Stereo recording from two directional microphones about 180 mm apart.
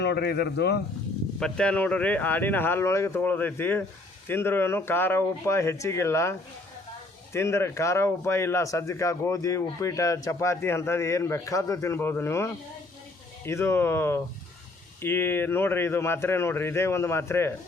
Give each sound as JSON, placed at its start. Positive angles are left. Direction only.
{"t": 0.0, "sound": "speech", "side_deg": 65}
{"t": 1.4, "sound": "speech", "side_deg": 5}
{"t": 7.3, "sound": "speech", "side_deg": 15}